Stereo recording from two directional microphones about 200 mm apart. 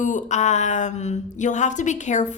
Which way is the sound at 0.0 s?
40° left (ahead or behind).